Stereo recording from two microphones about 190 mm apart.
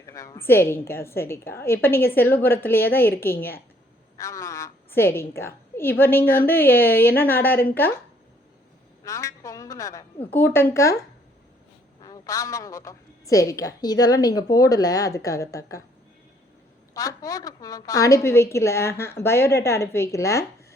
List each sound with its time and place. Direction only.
0.1 s a woman's voice: 15° left (ahead or behind)
9.0 s a woman's voice: 15° left (ahead or behind)
12.0 s a woman's voice: 20° left (ahead or behind)
16.9 s a woman's voice: 20° left (ahead or behind)